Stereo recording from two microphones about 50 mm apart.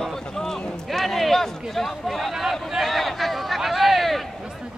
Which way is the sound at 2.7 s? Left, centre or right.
Centre.